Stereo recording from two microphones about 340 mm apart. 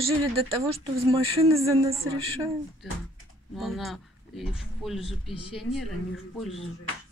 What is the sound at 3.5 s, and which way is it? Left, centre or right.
A woman's voice, centre.